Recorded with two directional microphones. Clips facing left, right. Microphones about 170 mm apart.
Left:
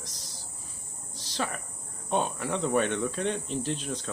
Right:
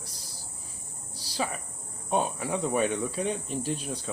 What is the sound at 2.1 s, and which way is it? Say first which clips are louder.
Speech: right 1 dB; 10° right (ahead or behind).